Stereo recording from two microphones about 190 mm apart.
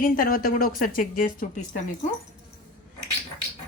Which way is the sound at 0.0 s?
50° left (ahead or behind).